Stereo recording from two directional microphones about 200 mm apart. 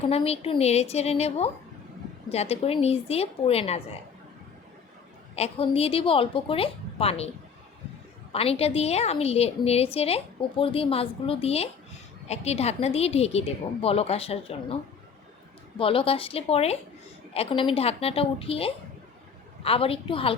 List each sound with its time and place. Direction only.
0.0 s a woman's voice: 30° left (ahead or behind)
5.4 s a woman's voice: 30° left (ahead or behind)
8.3 s a woman's voice: 30° left (ahead or behind)
15.8 s a woman's voice: 25° left (ahead or behind)